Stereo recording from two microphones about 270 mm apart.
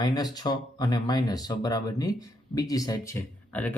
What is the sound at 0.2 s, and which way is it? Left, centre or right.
Speech, centre.